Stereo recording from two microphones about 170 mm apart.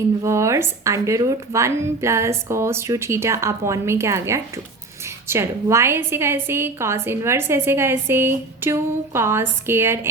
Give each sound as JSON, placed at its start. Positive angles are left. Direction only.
{"t": 0.2, "sound": "a woman's voice", "side_deg": -15}